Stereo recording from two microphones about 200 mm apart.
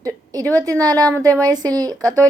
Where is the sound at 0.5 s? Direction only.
20° right (ahead or behind).